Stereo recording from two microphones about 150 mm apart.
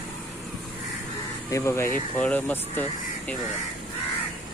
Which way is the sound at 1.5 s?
20° left (ahead or behind).